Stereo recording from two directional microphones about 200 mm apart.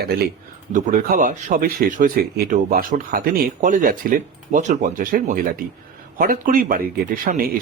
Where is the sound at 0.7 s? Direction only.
45° right (ahead or behind).